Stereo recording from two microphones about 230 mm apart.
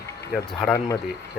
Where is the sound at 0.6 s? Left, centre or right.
Centre.